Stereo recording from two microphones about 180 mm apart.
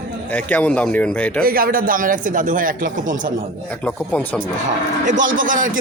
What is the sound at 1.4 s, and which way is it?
A man's voice, 55° right (ahead or behind).